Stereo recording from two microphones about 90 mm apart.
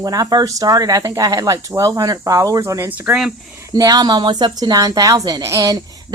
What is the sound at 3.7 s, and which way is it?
A woman's voice, 45° right (ahead or behind).